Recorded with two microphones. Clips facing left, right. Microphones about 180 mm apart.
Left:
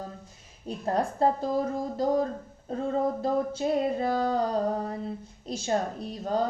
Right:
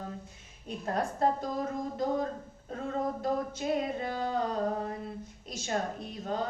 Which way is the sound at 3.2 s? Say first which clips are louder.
Left 5 dB; 30° left (ahead or behind).